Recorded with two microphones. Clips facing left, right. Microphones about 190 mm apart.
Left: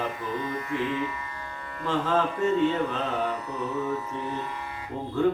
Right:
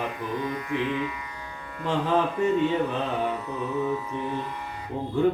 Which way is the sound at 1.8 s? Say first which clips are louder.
Right 1 dB; 15° right (ahead or behind).